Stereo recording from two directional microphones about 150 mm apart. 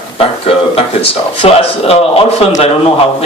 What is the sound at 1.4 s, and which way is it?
Speech, 40° left (ahead or behind).